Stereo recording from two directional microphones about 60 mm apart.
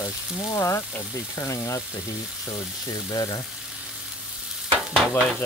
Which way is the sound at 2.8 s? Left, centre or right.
Left.